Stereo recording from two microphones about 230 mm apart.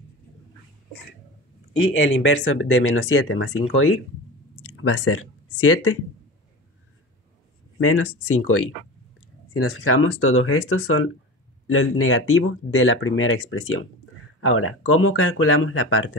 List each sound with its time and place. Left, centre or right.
2.1 s speech: left
7.8 s speech: left